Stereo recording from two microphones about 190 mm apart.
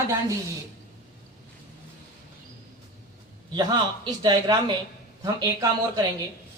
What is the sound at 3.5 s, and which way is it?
A man's voice, 20° right (ahead or behind).